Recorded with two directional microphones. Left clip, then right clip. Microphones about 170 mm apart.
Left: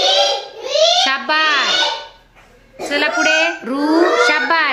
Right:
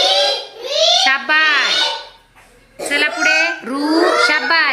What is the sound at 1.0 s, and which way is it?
Speech, 15° left (ahead or behind).